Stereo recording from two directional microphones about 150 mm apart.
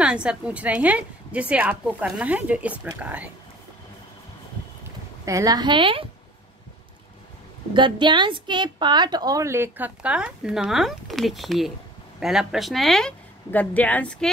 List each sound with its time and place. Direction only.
0.0 s a woman's voice: 5° right (ahead or behind)
5.2 s a woman's voice: 20° right (ahead or behind)
7.7 s a woman's voice: 30° right (ahead or behind); by 14.3 s 10° left (ahead or behind)